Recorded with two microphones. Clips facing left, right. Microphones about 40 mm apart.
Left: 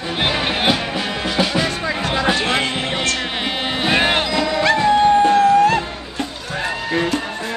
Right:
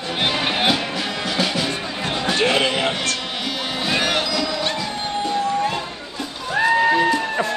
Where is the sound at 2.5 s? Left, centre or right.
Left.